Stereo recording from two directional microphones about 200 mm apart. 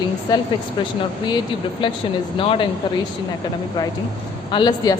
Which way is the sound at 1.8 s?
25° left (ahead or behind).